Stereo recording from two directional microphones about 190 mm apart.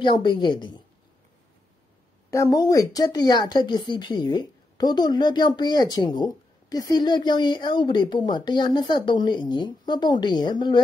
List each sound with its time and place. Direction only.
0.0 s a woman's voice: 25° left (ahead or behind)
2.3 s a woman's voice: 20° left (ahead or behind)